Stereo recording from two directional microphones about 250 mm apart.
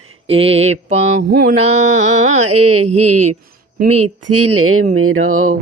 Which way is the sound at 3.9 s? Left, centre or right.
Right.